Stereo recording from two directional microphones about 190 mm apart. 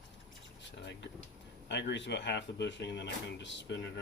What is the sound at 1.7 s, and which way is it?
Speech, 65° left (ahead or behind).